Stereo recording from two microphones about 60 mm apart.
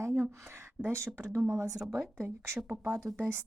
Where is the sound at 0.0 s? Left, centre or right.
Right.